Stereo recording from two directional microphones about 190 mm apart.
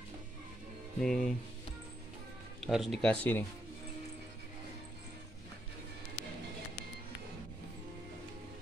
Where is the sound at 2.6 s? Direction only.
Centre (ahead or behind).